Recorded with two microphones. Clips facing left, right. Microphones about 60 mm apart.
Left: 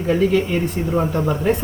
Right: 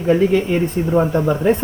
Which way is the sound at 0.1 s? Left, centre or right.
Centre.